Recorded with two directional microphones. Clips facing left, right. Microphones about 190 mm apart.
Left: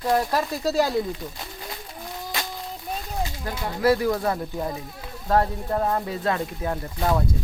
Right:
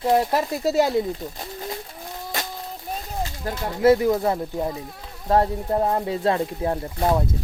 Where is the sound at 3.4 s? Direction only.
25° right (ahead or behind).